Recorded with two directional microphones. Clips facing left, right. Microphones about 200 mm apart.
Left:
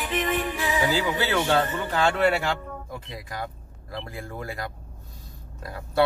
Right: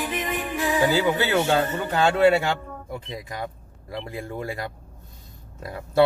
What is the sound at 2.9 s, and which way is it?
Speech, 25° right (ahead or behind).